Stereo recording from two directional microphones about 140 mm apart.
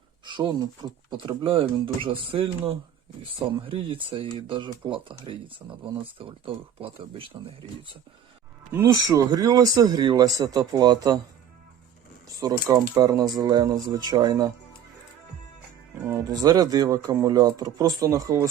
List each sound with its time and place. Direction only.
0.3 s speech: 30° right (ahead or behind)
8.7 s speech: 25° right (ahead or behind)
12.4 s speech: 25° right (ahead or behind)
16.3 s speech: 25° right (ahead or behind)